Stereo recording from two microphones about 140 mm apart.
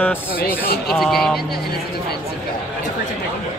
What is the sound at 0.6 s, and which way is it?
Speech, 90° left.